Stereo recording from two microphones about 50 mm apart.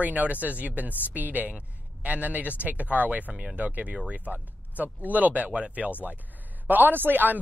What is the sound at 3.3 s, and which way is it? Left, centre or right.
Speech, centre.